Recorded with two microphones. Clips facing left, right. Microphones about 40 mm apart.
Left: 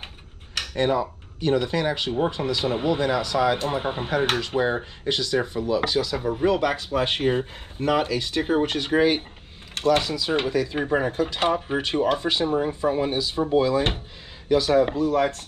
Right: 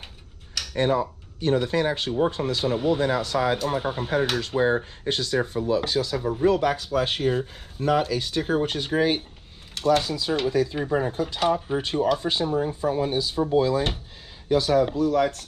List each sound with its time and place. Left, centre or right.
0.6 s a sound: left
1.4 s speech: left
8.6 s speech: left